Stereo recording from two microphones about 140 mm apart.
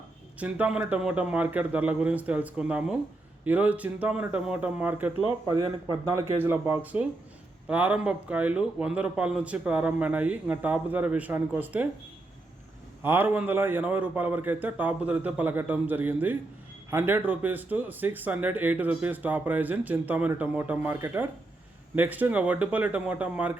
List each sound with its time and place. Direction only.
0.3 s speech: 10° right (ahead or behind)
5.5 s speech: 25° right (ahead or behind)
13.0 s speech: 15° right (ahead or behind)